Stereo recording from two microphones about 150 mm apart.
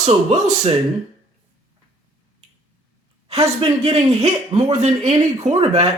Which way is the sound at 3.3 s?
45° right (ahead or behind).